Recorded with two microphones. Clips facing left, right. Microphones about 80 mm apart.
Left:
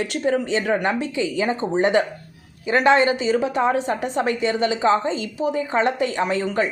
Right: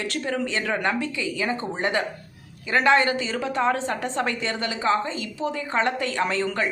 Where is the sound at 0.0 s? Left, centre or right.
Centre.